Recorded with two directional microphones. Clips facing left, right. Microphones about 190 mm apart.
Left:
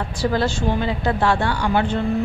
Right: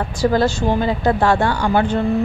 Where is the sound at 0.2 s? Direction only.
45° right (ahead or behind).